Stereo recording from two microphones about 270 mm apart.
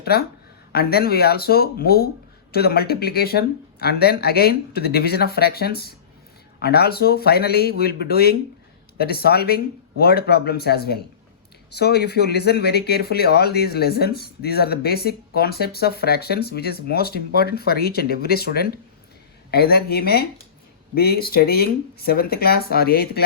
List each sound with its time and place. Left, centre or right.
0.0 s speech: left